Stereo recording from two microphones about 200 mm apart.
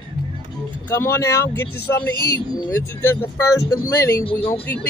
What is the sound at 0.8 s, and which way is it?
Speech, 10° left (ahead or behind).